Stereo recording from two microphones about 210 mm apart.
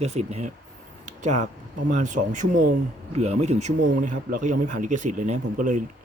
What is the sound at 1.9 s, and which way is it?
A man's voice, 35° right (ahead or behind).